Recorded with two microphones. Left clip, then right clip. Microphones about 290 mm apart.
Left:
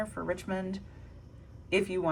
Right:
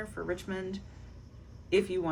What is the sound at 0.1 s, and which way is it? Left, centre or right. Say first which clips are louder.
Speech: left 2 dB; centre.